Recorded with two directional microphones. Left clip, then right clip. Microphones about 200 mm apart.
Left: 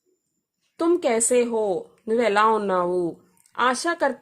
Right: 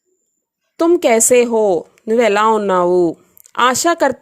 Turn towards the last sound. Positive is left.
turn(degrees=-30)  # may be behind; listen again after turning